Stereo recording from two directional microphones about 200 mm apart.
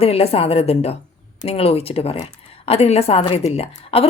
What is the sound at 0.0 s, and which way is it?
A woman's voice, 30° left (ahead or behind).